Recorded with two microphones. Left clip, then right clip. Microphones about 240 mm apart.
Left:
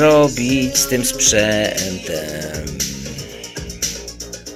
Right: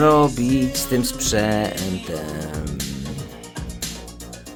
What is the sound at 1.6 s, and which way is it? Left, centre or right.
Speech, centre.